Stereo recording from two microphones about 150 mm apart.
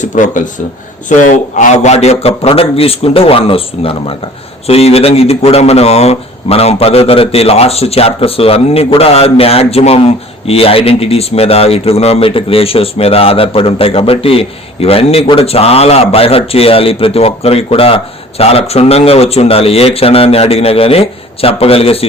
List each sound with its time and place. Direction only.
0.0 s speech: 60° left (ahead or behind); by 22.0 s 40° left (ahead or behind)